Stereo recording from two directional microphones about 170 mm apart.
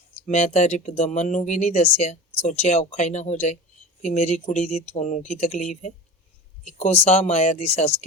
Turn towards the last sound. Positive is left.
turn(degrees=40)  # may be behind; listen again after turning